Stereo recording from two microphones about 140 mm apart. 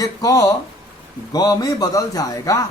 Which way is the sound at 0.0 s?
25° left (ahead or behind).